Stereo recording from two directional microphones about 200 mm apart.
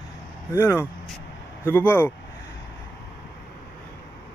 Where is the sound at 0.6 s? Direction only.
10° left (ahead or behind).